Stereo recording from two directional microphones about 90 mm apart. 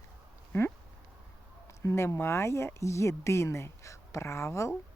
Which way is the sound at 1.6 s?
35° left (ahead or behind).